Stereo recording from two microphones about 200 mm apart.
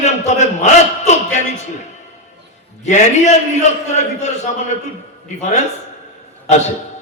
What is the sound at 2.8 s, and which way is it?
Speech, 35° left (ahead or behind).